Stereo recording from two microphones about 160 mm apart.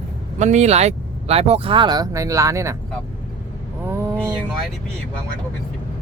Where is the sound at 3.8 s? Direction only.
15° right (ahead or behind).